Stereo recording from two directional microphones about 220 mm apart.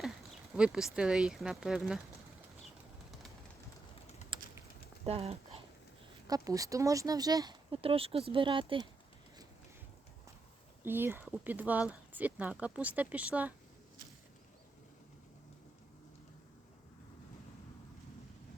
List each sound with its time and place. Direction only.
0.5 s speech: 5° right (ahead or behind)
4.3 s typing: 25° right (ahead or behind)
5.0 s speech: 25° right (ahead or behind)
6.2 s speech: 15° right (ahead or behind)
10.8 s speech: 10° right (ahead or behind)